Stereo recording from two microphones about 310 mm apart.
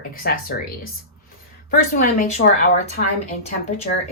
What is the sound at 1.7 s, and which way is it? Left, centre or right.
A woman's voice, left.